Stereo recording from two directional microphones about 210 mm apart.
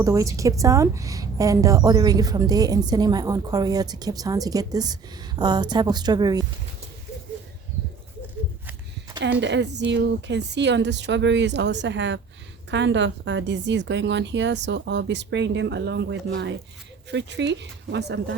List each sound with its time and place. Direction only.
0.0 s a woman's voice: 15° right (ahead or behind)
9.4 s a woman's voice: 55° right (ahead or behind)